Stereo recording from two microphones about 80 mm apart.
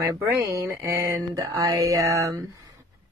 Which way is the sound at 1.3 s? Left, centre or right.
Right.